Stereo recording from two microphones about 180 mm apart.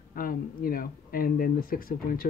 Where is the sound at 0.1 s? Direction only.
55° left (ahead or behind).